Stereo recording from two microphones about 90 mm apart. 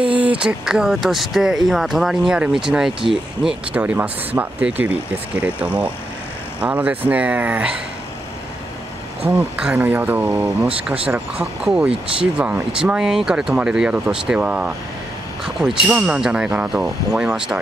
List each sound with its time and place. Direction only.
0.0 s speech: 15° right (ahead or behind)
9.8 s speech: 20° right (ahead or behind)